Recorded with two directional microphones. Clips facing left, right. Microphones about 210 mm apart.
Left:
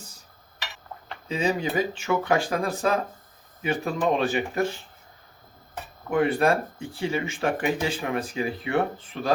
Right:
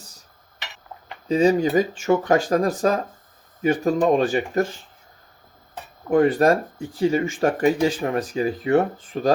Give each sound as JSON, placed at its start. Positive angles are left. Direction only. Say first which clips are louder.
{"t": 1.3, "sound": "speech", "louder": "right 8 dB", "side_deg": -45}
{"t": 6.1, "sound": "speech", "louder": "right 5 dB", "side_deg": -45}